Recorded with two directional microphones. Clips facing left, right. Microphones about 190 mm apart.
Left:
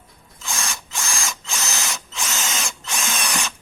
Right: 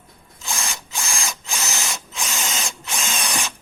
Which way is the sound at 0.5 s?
15° right (ahead or behind).